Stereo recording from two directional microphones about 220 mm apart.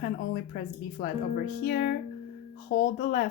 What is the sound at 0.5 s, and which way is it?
Speech, 40° left (ahead or behind).